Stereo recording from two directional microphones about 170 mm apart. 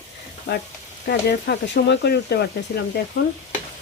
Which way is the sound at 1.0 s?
80° left.